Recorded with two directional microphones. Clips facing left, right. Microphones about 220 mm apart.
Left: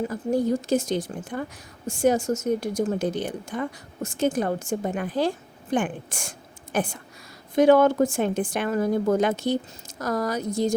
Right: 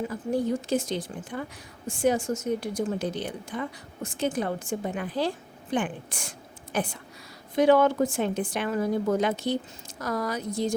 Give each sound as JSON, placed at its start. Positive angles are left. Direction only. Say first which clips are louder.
{"t": 0.1, "sound": "speech", "louder": "left 3 dB", "side_deg": 45}